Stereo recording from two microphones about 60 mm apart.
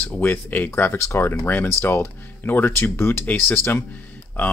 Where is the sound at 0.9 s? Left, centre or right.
Left.